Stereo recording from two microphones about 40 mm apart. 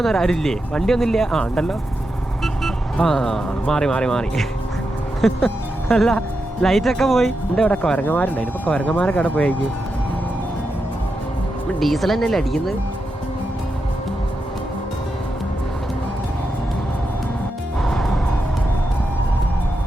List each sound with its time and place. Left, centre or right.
0.0 s speech: centre
5.2 s speech: centre
6.6 s speech: centre
7.9 s speech: left
11.8 s speech: centre
17.8 s music: centre